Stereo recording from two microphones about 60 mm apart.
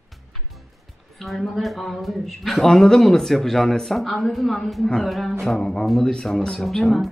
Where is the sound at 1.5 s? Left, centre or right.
Centre.